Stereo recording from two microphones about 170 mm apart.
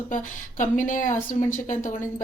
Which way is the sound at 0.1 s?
50° left (ahead or behind).